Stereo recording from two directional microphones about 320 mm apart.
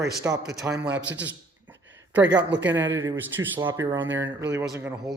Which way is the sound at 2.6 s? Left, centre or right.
Centre.